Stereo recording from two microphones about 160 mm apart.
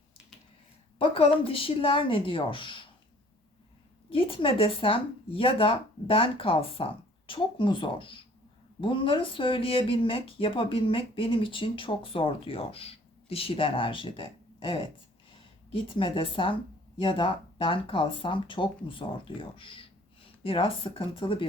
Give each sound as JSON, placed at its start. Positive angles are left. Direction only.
{"t": 0.9, "sound": "speech", "side_deg": 35}
{"t": 4.1, "sound": "speech", "side_deg": 35}